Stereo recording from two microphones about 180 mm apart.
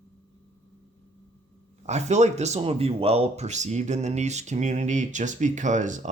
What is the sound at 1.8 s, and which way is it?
Speech, 40° right (ahead or behind).